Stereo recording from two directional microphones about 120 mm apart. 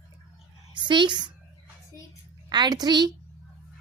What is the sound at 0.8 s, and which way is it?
Speech, 40° right (ahead or behind).